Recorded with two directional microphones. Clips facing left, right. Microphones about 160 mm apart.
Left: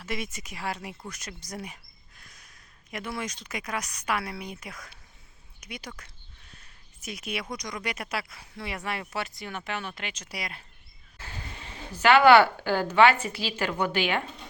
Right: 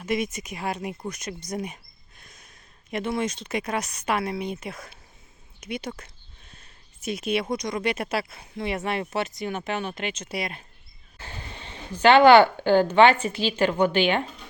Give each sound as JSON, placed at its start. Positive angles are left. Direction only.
{"t": 0.0, "sound": "a woman's voice", "side_deg": -20}